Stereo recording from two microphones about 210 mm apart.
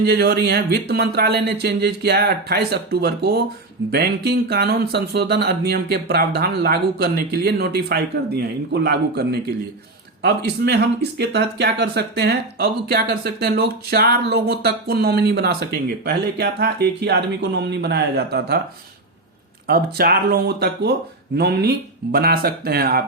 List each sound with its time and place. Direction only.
0.0 s speech: 50° right (ahead or behind)
19.6 s speech: 45° right (ahead or behind)